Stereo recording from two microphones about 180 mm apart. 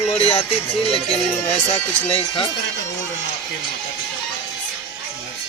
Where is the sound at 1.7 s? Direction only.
35° left (ahead or behind).